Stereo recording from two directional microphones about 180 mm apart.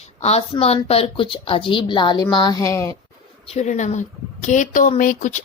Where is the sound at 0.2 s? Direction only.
35° left (ahead or behind); by 2.9 s 15° left (ahead or behind).